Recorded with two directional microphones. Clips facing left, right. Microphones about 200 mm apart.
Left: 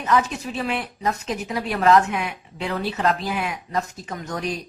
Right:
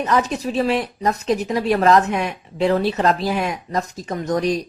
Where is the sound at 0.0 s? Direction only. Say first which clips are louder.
Right 2 dB; 40° right (ahead or behind).